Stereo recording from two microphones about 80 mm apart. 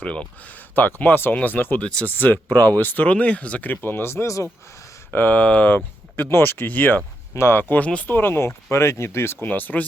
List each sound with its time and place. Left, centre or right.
0.0 s speech: centre; by 4.4 s left
5.1 s speech: left
7.7 s speech: centre
8.1 s speech: left
9.5 s speech: left